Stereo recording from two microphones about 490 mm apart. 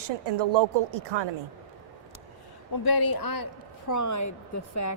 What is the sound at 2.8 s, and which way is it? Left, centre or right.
A woman's voice, left.